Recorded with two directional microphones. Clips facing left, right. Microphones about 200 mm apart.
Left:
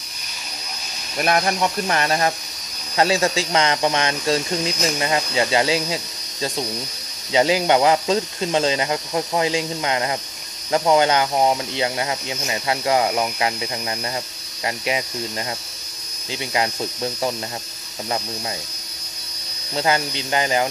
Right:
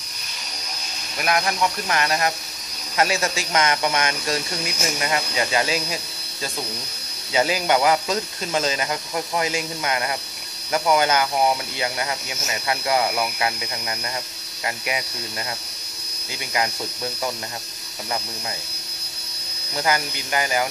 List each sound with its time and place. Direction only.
1.2 s speech: 35° left (ahead or behind)
7.3 s speech: 20° left (ahead or behind)
14.6 s speech: 25° left (ahead or behind)
16.3 s speech: 25° left (ahead or behind)
19.7 s speech: 25° left (ahead or behind)